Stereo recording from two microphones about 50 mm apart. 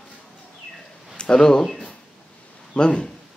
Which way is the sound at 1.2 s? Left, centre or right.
Centre.